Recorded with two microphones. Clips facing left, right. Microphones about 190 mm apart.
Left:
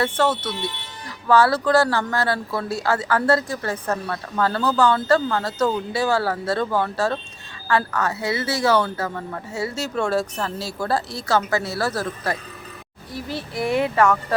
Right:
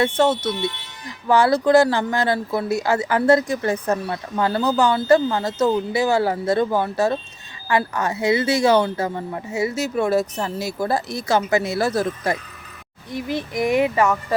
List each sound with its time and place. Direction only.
0.0 s speech: 25° right (ahead or behind)